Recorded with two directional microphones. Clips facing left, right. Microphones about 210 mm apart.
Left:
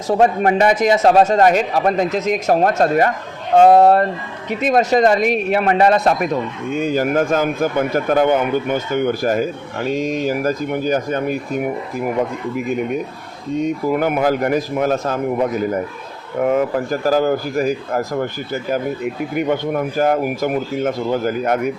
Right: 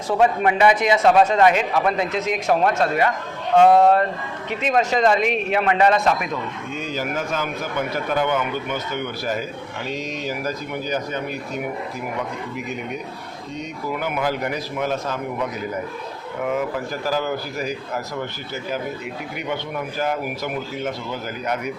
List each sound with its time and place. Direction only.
0.1 s a man's voice: 40° left (ahead or behind)